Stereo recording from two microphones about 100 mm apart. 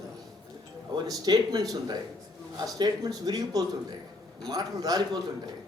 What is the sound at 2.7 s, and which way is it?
A woman's voice, 40° right (ahead or behind).